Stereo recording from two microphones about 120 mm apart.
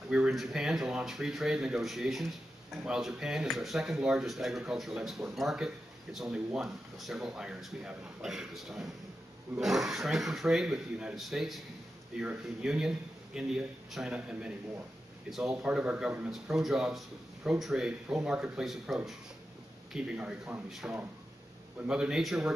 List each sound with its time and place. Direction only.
0.1 s a man's voice: 5° right (ahead or behind)